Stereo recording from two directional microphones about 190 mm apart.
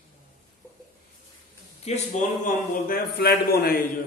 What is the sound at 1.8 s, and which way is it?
Speech, 35° left (ahead or behind).